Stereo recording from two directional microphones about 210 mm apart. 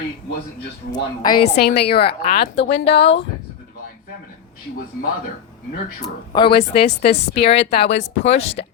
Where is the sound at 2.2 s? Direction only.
35° left (ahead or behind).